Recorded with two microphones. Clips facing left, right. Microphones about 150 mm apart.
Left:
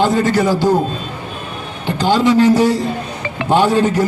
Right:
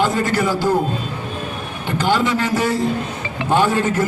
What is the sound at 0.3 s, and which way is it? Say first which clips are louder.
Speech: left 4 dB; 40° left (ahead or behind).